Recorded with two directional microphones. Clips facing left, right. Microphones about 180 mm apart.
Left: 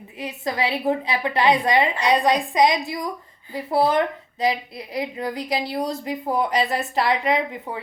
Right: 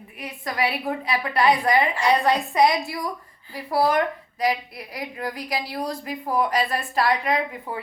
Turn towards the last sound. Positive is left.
turn(degrees=25)  # may be behind; listen again after turning